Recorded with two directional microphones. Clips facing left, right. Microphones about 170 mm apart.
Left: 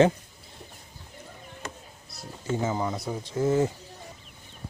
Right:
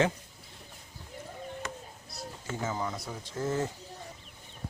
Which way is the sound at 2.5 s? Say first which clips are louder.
Left 6 dB; 20° left (ahead or behind).